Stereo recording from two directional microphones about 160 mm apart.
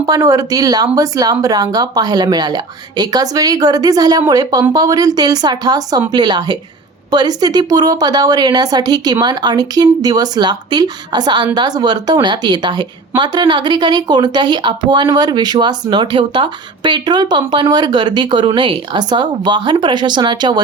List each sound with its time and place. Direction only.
0.0 s speech: 25° right (ahead or behind)